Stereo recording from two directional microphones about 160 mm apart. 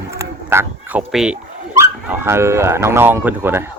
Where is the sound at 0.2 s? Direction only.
15° right (ahead or behind).